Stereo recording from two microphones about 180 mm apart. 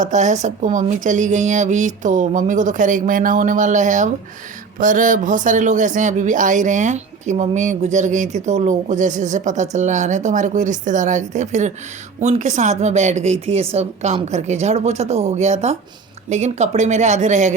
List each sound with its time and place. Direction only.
0.0 s speech: 40° right (ahead or behind)